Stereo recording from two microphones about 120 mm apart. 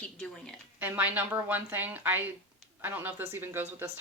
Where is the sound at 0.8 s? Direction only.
15° right (ahead or behind).